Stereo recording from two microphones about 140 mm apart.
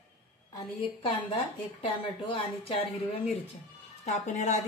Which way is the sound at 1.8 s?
40° left (ahead or behind).